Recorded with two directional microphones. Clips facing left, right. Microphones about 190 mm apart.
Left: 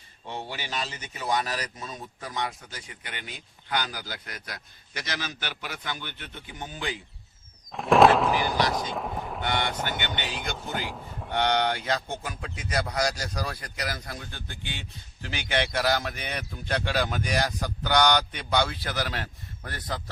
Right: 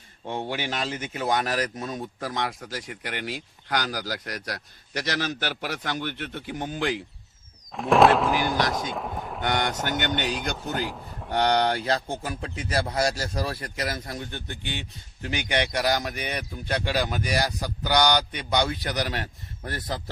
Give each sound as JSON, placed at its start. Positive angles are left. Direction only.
{"t": 0.3, "sound": "a man's voice", "side_deg": -50}
{"t": 2.2, "sound": "speech", "side_deg": -85}
{"t": 7.7, "sound": "speech", "side_deg": 0}
{"t": 9.4, "sound": "a man's voice", "side_deg": -45}
{"t": 10.8, "sound": "a man's voice", "side_deg": 0}
{"t": 11.3, "sound": "speech", "side_deg": -40}